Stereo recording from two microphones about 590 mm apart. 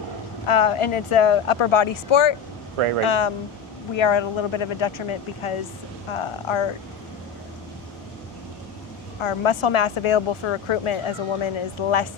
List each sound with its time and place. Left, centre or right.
0.4 s speech: left
2.7 s speech: right
3.0 s speech: left
9.2 s speech: left